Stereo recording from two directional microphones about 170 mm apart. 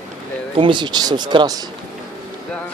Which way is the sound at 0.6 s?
25° right (ahead or behind).